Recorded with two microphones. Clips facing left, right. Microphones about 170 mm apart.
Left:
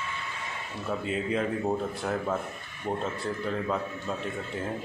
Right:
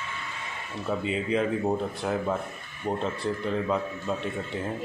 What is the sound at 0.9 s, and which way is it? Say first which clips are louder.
A man's voice: right 2 dB; centre (ahead or behind).